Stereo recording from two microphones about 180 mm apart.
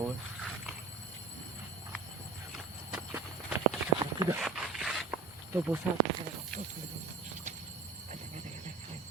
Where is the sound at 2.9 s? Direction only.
5° right (ahead or behind).